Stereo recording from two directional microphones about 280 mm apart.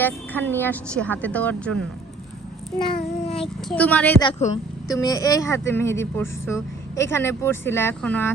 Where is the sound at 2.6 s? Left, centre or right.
Centre.